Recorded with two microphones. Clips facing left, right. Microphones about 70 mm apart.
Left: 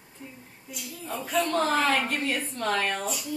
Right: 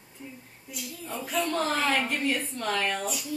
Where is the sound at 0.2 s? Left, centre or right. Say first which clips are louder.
Right 1 dB; centre.